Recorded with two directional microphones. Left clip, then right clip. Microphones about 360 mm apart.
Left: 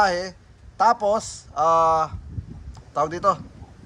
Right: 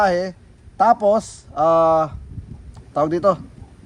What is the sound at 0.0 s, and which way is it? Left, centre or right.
Speech, centre.